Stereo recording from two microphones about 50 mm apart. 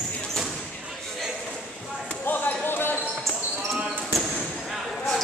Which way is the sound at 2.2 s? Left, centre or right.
Left.